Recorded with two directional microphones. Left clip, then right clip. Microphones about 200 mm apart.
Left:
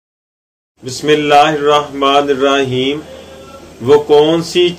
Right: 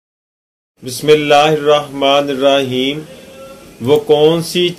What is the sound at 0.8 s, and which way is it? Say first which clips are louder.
A man's voice: right 1 dB; 45° right (ahead or behind).